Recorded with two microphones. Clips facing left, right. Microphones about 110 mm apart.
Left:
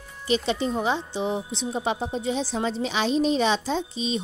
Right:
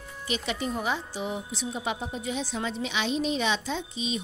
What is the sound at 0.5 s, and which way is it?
A woman's voice, 30° left (ahead or behind).